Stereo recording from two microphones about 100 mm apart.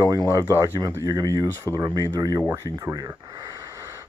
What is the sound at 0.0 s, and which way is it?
Speech, 35° right (ahead or behind).